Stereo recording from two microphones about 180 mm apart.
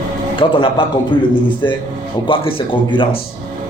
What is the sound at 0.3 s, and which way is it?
Speech, 30° left (ahead or behind).